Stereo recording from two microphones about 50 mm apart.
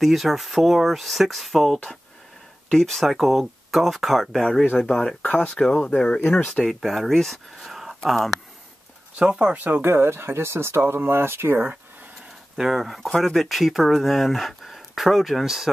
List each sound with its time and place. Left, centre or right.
0.0 s speech: centre
5.2 s speech: left
6.8 s speech: centre
9.2 s speech: right
9.6 s speech: right
10.8 s speech: right
11.1 s speech: right
12.5 s speech: centre